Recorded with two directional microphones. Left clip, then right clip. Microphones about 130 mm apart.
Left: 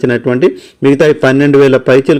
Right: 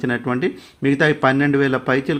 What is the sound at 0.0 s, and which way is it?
A man's voice, 30° left (ahead or behind).